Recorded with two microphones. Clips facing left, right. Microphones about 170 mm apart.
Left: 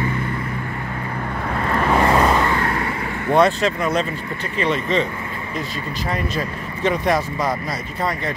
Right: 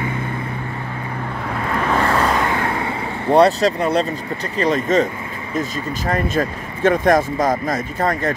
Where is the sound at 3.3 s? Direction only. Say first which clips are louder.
Right 3 dB; 35° right (ahead or behind).